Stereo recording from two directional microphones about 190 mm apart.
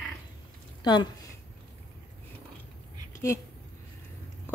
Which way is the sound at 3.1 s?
15° left (ahead or behind).